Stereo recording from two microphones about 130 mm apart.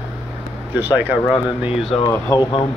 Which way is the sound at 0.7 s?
15° right (ahead or behind).